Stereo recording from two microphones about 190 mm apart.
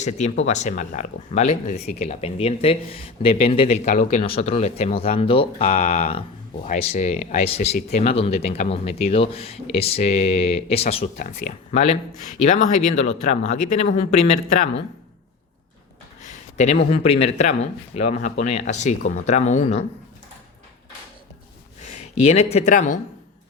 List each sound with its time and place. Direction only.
0.0 s speech: 35° left (ahead or behind)
16.2 s a sound: 40° left (ahead or behind)
16.9 s speech: 30° left (ahead or behind)
21.8 s speech: 35° left (ahead or behind)